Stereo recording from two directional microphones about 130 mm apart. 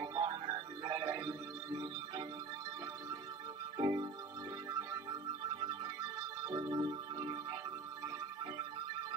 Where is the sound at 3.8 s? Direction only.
35° right (ahead or behind).